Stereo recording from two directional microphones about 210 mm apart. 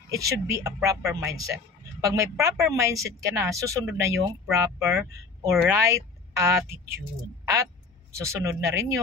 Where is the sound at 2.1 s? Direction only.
15° right (ahead or behind).